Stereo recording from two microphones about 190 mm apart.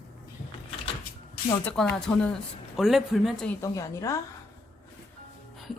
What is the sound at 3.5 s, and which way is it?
Speech, 15° left (ahead or behind).